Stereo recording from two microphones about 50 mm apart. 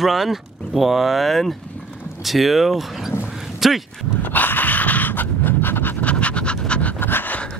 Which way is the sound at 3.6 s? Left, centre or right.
Centre.